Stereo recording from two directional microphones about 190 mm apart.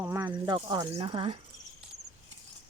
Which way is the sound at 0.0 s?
10° right (ahead or behind).